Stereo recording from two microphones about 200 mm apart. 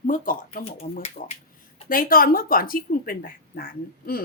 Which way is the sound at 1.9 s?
45° left (ahead or behind).